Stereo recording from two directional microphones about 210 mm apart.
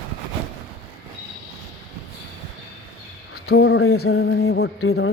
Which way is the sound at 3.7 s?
80° left.